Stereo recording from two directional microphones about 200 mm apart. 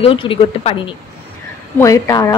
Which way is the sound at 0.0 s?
25° left (ahead or behind).